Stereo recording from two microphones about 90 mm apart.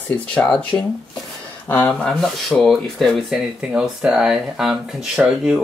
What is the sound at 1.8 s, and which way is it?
Speech, 10° left (ahead or behind).